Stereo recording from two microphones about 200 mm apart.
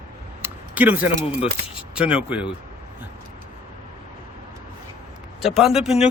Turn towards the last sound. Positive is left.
turn(degrees=-5)  # may be behind; listen again after turning